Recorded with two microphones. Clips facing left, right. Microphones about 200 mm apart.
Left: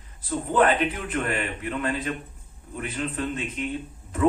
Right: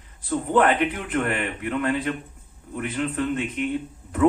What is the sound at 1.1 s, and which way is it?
A man's voice, 55° right (ahead or behind).